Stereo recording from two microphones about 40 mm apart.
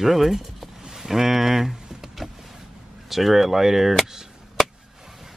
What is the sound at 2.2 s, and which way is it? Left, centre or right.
Vehicle, centre.